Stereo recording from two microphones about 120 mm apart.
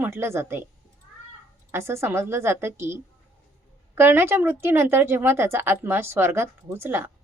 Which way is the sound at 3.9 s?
20° right (ahead or behind).